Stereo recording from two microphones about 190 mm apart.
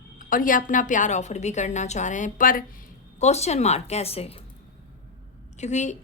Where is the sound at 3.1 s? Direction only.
35° left (ahead or behind).